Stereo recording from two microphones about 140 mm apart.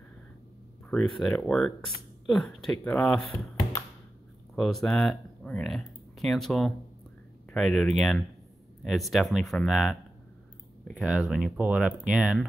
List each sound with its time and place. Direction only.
0.8 s speech: 10° left (ahead or behind)
4.6 s speech: centre (ahead or behind)
11.0 s speech: 5° right (ahead or behind)